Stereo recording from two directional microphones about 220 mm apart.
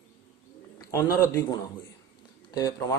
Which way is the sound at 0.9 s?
15° left (ahead or behind).